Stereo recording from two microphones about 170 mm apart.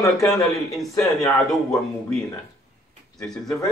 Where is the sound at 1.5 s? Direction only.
5° left (ahead or behind).